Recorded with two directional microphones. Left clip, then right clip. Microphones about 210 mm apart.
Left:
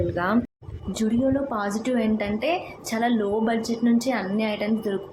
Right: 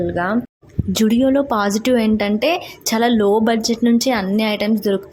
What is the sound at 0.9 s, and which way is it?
A woman's voice, 45° right (ahead or behind).